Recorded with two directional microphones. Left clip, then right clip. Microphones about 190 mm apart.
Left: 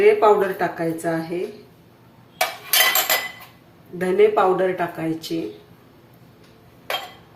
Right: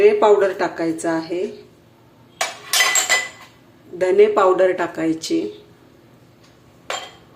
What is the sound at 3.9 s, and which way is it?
Speech, 40° right (ahead or behind).